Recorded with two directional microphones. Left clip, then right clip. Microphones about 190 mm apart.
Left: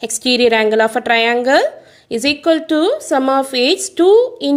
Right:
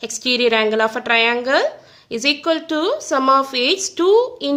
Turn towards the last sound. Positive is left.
turn(degrees=15)  # may be behind; listen again after turning